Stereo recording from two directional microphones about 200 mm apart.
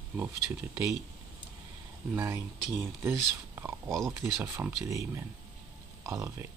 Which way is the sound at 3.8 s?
Centre (ahead or behind).